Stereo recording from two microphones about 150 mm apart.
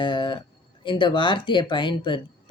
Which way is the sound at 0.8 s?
30° left (ahead or behind).